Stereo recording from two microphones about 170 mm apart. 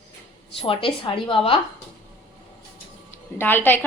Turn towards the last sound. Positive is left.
turn(degrees=10)  # may be behind; listen again after turning